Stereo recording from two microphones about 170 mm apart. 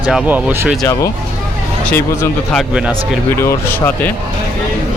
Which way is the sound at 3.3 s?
15° left (ahead or behind).